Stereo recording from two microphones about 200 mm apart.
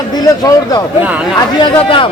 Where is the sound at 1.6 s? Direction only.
25° left (ahead or behind).